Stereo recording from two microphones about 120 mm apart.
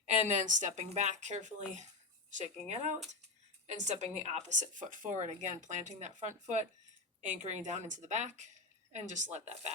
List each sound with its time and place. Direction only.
0.0 s a woman's voice: 80° right
2.3 s a woman's voice: 70° right (ahead or behind)